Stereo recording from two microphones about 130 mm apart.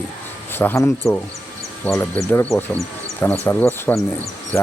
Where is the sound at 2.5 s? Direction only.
Centre (ahead or behind).